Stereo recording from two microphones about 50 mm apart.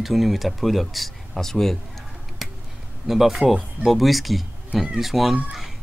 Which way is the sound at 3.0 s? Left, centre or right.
Centre.